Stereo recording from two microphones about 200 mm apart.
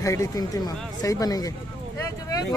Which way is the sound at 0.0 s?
15° left (ahead or behind).